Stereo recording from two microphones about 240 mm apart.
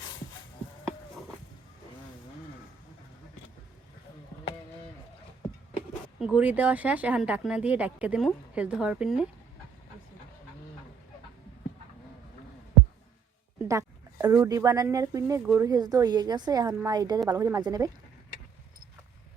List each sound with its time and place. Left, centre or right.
6.1 s speech: centre
13.6 s speech: centre